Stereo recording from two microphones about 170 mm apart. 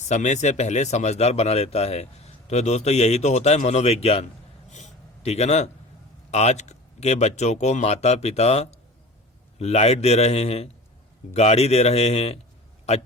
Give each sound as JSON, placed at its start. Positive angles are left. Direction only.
{"t": 0.0, "sound": "speech", "side_deg": 45}
{"t": 4.7, "sound": "a sound", "side_deg": 40}
{"t": 6.3, "sound": "speech", "side_deg": 40}